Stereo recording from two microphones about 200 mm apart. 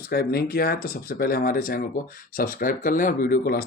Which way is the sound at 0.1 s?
50° left (ahead or behind).